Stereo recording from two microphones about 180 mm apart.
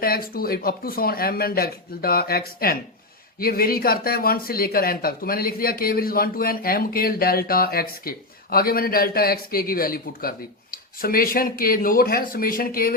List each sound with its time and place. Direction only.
0.0 s speech: 55° left (ahead or behind)